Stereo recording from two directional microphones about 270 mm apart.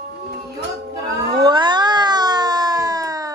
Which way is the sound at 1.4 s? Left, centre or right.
Centre.